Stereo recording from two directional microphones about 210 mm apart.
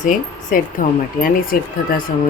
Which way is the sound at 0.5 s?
40° left (ahead or behind).